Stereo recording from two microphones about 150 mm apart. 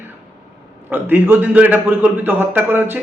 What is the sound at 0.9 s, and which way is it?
A man's voice, 15° right (ahead or behind).